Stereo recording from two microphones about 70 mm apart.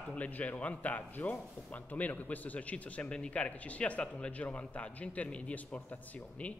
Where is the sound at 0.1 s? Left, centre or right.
Left.